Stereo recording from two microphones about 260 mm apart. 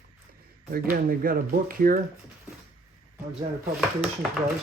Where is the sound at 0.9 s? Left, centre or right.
Right.